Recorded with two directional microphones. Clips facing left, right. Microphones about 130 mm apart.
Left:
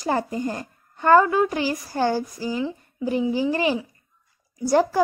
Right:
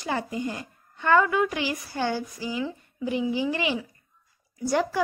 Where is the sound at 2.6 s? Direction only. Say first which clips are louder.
Left 3 dB; 25° left (ahead or behind).